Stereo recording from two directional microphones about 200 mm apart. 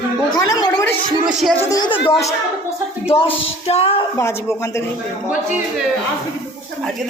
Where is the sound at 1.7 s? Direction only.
20° left (ahead or behind).